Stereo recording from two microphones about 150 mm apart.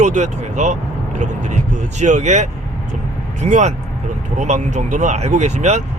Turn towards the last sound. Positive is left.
turn(degrees=-50)  # may be behind; listen again after turning